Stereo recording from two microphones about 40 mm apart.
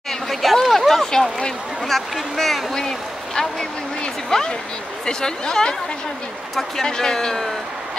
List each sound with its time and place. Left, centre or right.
0.3 s a sound: centre
1.9 s speech: centre
4.3 s speech: centre
6.8 s speech: centre